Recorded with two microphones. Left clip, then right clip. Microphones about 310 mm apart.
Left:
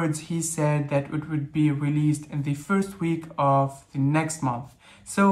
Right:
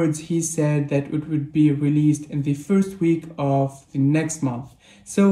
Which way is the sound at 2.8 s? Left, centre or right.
Left.